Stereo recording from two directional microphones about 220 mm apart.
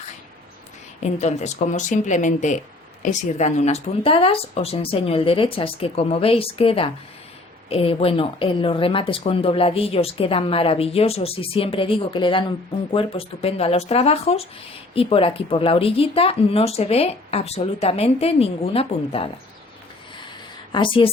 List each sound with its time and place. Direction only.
1.0 s speech: 30° left (ahead or behind)
20.7 s speech: 25° left (ahead or behind)